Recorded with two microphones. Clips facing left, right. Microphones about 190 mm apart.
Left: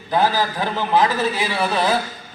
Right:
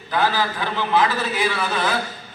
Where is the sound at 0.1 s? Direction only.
40° left (ahead or behind).